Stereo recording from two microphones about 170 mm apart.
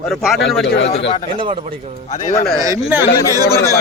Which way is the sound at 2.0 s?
45° left (ahead or behind).